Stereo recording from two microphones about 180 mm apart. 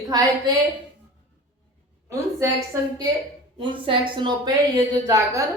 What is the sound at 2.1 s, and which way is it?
A woman's voice, 15° right (ahead or behind).